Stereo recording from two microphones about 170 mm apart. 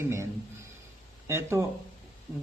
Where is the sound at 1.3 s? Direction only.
15° right (ahead or behind).